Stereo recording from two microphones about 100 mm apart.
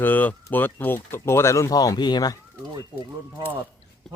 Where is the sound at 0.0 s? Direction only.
15° left (ahead or behind).